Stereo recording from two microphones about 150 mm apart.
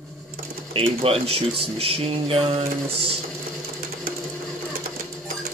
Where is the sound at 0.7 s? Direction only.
40° right (ahead or behind).